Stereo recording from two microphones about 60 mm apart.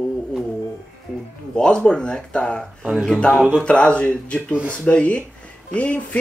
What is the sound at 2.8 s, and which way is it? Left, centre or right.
Speech, centre.